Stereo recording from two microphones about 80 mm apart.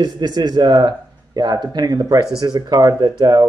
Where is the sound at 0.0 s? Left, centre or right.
Right.